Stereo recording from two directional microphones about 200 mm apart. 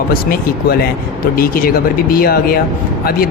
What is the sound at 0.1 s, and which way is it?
Speech, 50° left (ahead or behind).